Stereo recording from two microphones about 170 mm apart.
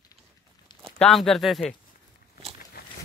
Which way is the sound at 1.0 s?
Centre (ahead or behind).